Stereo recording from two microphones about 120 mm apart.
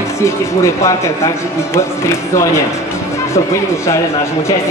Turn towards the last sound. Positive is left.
turn(degrees=25)  # may be behind; listen again after turning